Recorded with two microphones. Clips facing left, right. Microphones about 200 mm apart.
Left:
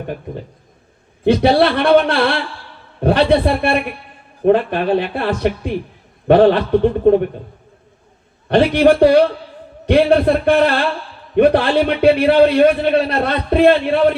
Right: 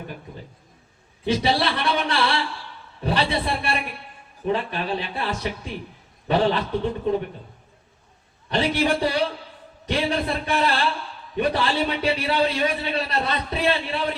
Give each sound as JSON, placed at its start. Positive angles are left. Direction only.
{"t": 1.2, "sound": "a man's voice", "side_deg": 55}
{"t": 8.4, "sound": "a man's voice", "side_deg": 55}